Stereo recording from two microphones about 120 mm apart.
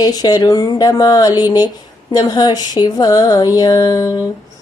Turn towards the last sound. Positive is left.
turn(degrees=30)  # may be behind; listen again after turning